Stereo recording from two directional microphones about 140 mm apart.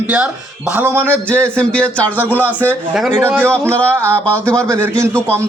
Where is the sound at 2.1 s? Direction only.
10° right (ahead or behind).